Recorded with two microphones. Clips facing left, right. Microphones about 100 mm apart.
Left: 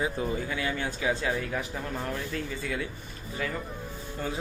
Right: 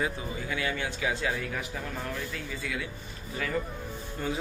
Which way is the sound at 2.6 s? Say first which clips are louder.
Even; 35° left (ahead or behind).